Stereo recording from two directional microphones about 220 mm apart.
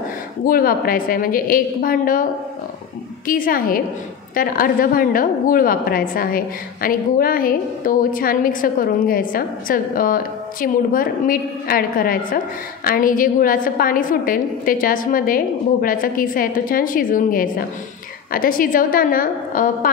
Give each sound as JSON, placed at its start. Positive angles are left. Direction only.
{"t": 0.5, "sound": "a woman's voice", "side_deg": 40}
{"t": 3.3, "sound": "a woman's voice", "side_deg": 40}